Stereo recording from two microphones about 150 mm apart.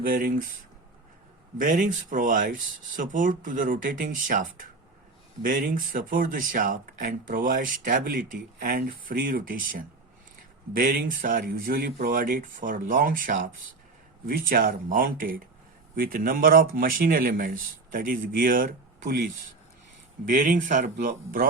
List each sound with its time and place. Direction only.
0.0 s speech: 70° right (ahead or behind)
1.5 s speech: 60° right (ahead or behind)
20.2 s speech: 60° right (ahead or behind)